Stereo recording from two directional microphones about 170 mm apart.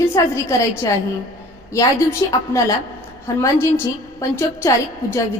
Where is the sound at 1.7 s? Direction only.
20° left (ahead or behind).